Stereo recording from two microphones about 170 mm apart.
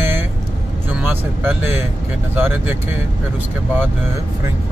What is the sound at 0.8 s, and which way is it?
Speech, 10° right (ahead or behind).